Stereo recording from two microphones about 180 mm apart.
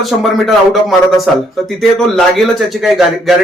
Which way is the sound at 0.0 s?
Centre (ahead or behind).